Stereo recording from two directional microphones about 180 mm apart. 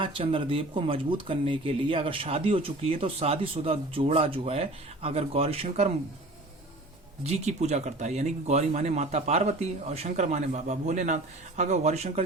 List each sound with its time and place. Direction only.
0.0 s speech: 30° right (ahead or behind)
7.3 s speech: 35° right (ahead or behind)